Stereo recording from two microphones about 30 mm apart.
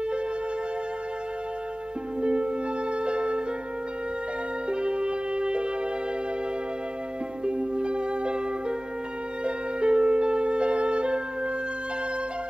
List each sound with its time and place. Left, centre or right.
2.2 s music: right
4.6 s music: right
7.4 s music: right